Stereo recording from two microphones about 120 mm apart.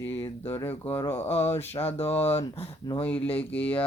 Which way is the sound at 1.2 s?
60° left (ahead or behind).